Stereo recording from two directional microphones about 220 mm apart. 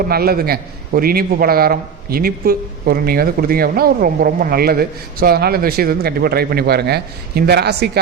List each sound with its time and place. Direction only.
0.1 s a man's voice: 45° right (ahead or behind)